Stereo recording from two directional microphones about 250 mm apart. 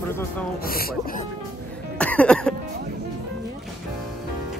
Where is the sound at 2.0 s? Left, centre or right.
Centre.